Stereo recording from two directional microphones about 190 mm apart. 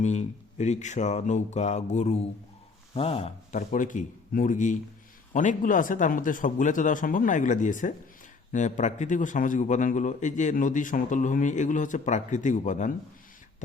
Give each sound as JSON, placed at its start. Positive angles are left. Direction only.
{"t": 0.0, "sound": "a man's voice", "side_deg": 35}